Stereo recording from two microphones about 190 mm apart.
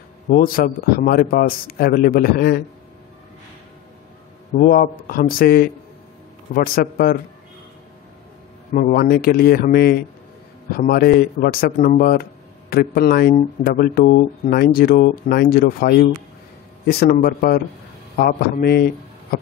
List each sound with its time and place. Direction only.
0.3 s speech: 50° left (ahead or behind)
4.6 s speech: 50° left (ahead or behind)
8.7 s speech: 50° left (ahead or behind)